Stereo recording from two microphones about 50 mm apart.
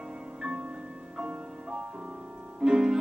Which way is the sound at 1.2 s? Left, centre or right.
Right.